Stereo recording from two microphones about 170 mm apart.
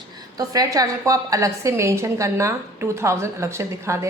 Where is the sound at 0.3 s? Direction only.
20° right (ahead or behind).